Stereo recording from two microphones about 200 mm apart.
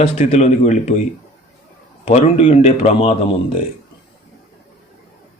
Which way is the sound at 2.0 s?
30° left (ahead or behind).